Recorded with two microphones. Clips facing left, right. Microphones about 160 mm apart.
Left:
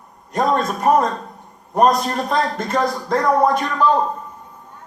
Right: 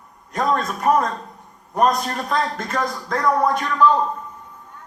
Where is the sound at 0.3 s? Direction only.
25° left (ahead or behind).